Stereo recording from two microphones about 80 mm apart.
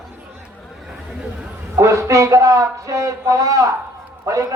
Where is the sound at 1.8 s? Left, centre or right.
Right.